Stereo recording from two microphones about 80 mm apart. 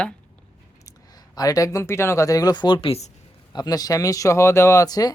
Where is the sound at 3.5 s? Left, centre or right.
Left.